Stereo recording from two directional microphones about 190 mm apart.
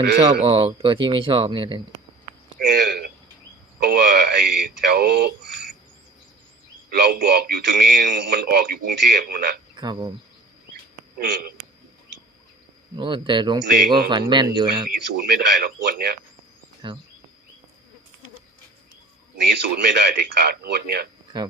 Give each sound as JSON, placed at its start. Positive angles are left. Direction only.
{"t": 0.2, "sound": "speech", "side_deg": -30}
{"t": 2.6, "sound": "a sound", "side_deg": -60}
{"t": 3.8, "sound": "a man's voice", "side_deg": -55}
{"t": 6.9, "sound": "a man's voice", "side_deg": -55}
{"t": 9.7, "sound": "frog", "side_deg": -25}
{"t": 11.2, "sound": "a man's voice", "side_deg": -55}
{"t": 13.0, "sound": "speech", "side_deg": -25}
{"t": 14.8, "sound": "a man's voice", "side_deg": -55}
{"t": 16.8, "sound": "speech", "side_deg": -25}
{"t": 19.5, "sound": "a man's voice", "side_deg": -60}